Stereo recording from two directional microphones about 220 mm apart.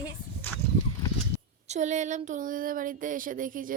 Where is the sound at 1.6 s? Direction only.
30° right (ahead or behind).